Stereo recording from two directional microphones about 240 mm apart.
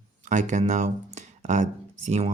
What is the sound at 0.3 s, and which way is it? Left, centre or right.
Speech, right.